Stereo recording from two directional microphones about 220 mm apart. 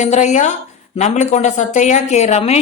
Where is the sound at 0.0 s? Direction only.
30° left (ahead or behind).